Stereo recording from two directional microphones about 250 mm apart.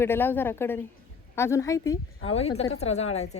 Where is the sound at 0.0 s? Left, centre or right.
Centre.